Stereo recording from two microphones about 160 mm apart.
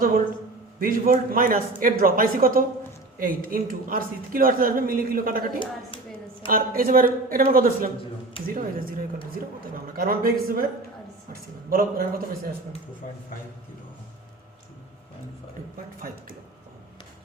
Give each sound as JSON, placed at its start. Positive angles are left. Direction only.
{"t": 0.8, "sound": "a woman's voice", "side_deg": -65}
{"t": 6.5, "sound": "a woman's voice", "side_deg": -60}